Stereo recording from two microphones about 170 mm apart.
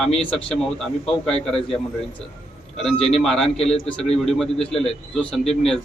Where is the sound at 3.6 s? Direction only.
35° left (ahead or behind).